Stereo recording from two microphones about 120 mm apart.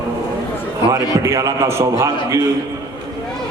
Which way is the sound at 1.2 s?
25° right (ahead or behind).